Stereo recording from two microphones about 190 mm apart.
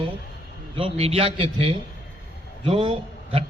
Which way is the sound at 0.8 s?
30° right (ahead or behind).